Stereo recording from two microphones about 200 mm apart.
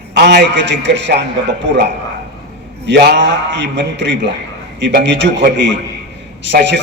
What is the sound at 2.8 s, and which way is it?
A man's voice, 60° right (ahead or behind).